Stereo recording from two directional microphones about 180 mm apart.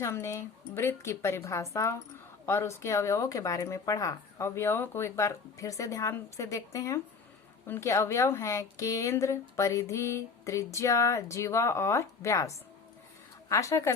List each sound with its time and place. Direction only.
0.0 s speech: 15° left (ahead or behind)